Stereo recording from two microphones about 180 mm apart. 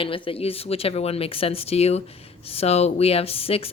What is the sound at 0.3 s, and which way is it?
Speech, 30° left (ahead or behind).